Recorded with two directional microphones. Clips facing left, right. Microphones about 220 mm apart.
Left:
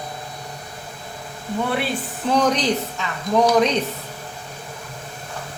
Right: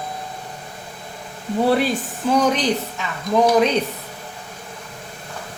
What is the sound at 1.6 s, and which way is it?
Speech, 35° right (ahead or behind).